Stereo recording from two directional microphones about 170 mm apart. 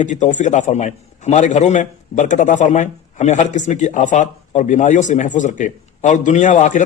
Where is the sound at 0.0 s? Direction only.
45° left (ahead or behind).